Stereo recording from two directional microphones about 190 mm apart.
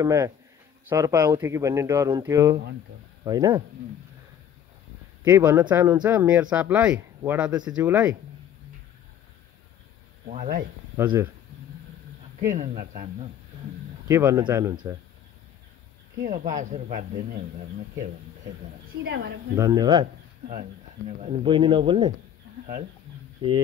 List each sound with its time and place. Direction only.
0.0 s speech: 15° right (ahead or behind)
3.3 s speech: 20° right (ahead or behind)
5.2 s speech: 15° right (ahead or behind)
10.2 s speech: 40° right (ahead or behind)
11.0 s speech: 15° right (ahead or behind)
12.4 s speech: 40° right (ahead or behind)
14.0 s speech: 15° right (ahead or behind)
16.3 s speech: 45° right (ahead or behind)
19.0 s a woman's voice: 65° right (ahead or behind)
19.5 s speech: 20° right (ahead or behind)
21.2 s speech: 30° right (ahead or behind)
23.4 s speech: 25° right (ahead or behind)